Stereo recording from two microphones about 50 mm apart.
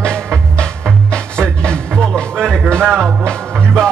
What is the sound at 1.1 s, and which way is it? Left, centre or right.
Music, centre.